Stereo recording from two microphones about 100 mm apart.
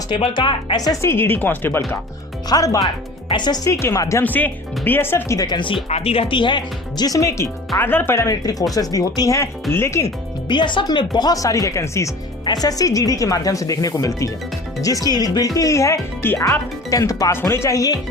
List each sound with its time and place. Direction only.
0.2 s speech: 55° left (ahead or behind)
1.0 s speech: 25° left (ahead or behind)
2.5 s speech: 35° left (ahead or behind)
3.7 s speech: 25° left (ahead or behind)
5.4 s speech: 50° left (ahead or behind); by 7.5 s 30° left (ahead or behind)
7.8 s speech: 20° left (ahead or behind)
8.3 s speech: 40° left (ahead or behind)
10.5 s speech: 50° left (ahead or behind)